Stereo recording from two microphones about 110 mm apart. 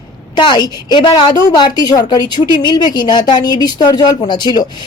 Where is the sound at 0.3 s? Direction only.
45° left (ahead or behind).